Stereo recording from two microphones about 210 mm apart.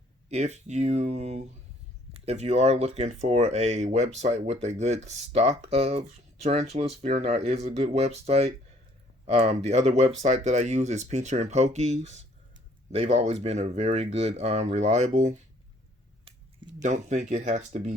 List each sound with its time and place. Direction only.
0.3 s speech: 35° right (ahead or behind)